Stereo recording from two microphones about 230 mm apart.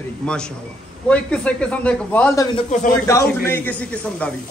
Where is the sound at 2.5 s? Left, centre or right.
Left.